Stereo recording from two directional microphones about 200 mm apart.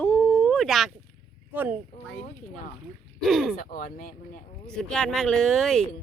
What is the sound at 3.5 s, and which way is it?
Speech, 45° left (ahead or behind).